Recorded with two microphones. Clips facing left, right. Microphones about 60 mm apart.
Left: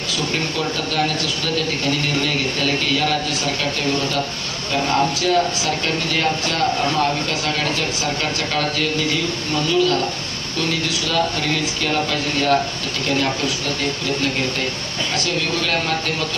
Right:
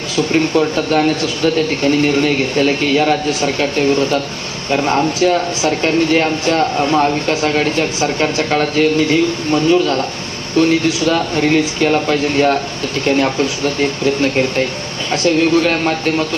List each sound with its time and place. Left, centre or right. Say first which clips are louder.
0.3 s speech: right 11 dB; right
4.7 s speech: right 4 dB; right
13.7 s speech: right 7 dB; right